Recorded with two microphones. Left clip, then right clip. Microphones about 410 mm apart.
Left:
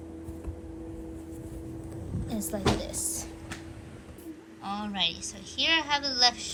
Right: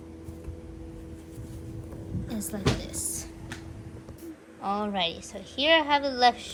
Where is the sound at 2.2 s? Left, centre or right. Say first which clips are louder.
Left 2 dB; centre.